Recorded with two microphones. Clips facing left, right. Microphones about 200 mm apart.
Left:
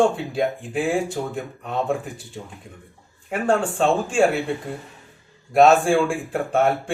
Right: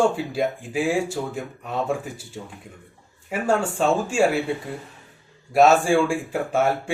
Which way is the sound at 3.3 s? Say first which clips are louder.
Left 1 dB; 5° right (ahead or behind).